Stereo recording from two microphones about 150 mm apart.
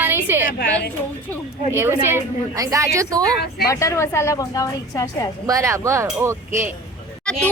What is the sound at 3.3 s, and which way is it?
Speech, 90° left.